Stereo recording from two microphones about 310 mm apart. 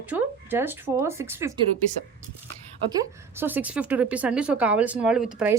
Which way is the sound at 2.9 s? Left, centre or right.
Centre.